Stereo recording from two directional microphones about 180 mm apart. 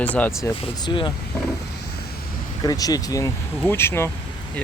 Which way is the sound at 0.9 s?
25° left (ahead or behind).